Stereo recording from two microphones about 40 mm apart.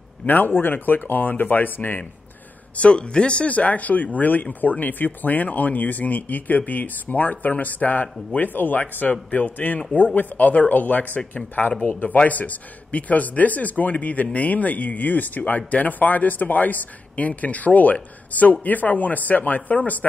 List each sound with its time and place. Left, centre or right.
0.3 s speech: left
2.7 s speech: left
9.0 s speech: left